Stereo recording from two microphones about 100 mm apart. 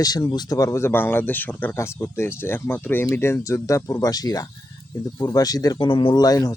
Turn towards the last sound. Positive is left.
turn(degrees=40)  # may be behind; listen again after turning